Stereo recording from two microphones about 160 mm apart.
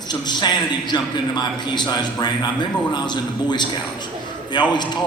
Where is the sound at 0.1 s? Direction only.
25° left (ahead or behind).